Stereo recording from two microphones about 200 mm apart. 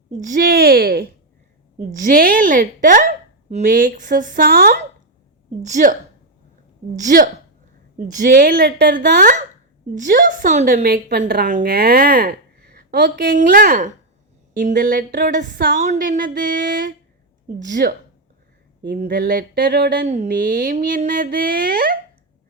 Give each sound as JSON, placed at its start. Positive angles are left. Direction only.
{"t": 0.1, "sound": "a woman's voice", "side_deg": -40}
{"t": 5.6, "sound": "speech", "side_deg": -35}
{"t": 6.9, "sound": "speech", "side_deg": -40}
{"t": 8.4, "sound": "speech", "side_deg": -55}
{"t": 9.9, "sound": "a woman's voice", "side_deg": -40}
{"t": 13.3, "sound": "a woman's voice", "side_deg": -45}
{"t": 15.8, "sound": "a woman's voice", "side_deg": -40}
{"t": 19.0, "sound": "a woman's voice", "side_deg": -45}